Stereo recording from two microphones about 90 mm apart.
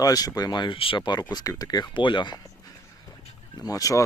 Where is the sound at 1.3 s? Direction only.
45° left (ahead or behind).